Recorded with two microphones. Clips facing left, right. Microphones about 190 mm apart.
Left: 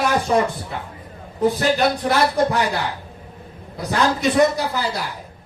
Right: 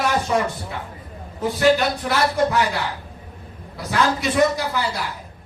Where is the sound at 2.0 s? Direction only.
35° left (ahead or behind).